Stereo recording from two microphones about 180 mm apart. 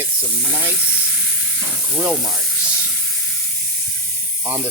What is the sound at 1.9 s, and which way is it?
Speech, 5° right (ahead or behind).